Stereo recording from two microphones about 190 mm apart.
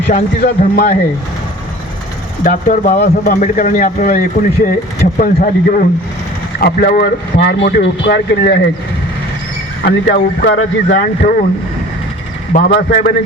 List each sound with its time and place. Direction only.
0.1 s speech: 40° left (ahead or behind)
2.4 s speech: 45° left (ahead or behind); by 8.6 s 60° left (ahead or behind)
9.8 s speech: 60° left (ahead or behind)
10.9 s speech: 45° left (ahead or behind)
12.5 s speech: 50° left (ahead or behind)